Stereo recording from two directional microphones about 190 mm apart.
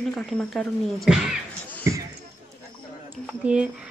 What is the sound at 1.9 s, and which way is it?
Basketball bounce, 15° right (ahead or behind).